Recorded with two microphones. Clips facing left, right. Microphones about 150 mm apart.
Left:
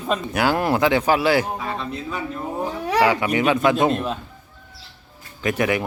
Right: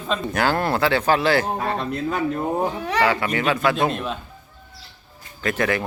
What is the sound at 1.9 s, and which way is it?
Speech, 65° right (ahead or behind).